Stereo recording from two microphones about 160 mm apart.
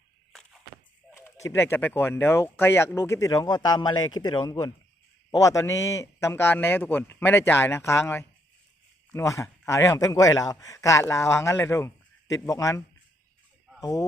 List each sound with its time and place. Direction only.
1.1 s speech: 20° left (ahead or behind)